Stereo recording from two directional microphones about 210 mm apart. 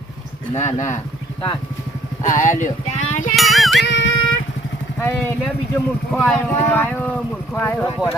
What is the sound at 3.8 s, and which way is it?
Music, 55° left (ahead or behind).